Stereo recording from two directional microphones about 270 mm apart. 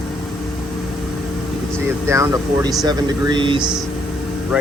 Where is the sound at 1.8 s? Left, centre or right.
Centre.